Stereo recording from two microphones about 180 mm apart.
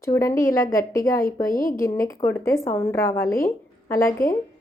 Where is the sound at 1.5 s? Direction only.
50° left (ahead or behind).